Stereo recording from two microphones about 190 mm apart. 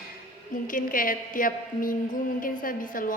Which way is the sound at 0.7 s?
45° left (ahead or behind).